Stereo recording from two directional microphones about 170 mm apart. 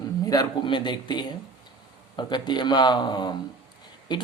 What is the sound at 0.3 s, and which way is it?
Speech, 25° left (ahead or behind).